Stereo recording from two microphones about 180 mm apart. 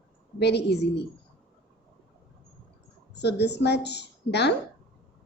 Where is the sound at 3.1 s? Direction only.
70° left (ahead or behind).